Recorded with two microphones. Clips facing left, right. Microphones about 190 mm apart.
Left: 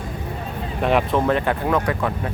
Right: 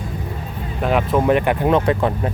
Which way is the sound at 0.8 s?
Centre (ahead or behind).